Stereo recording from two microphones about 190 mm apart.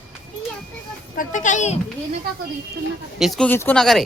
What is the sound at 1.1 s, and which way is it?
Speech, 40° left (ahead or behind).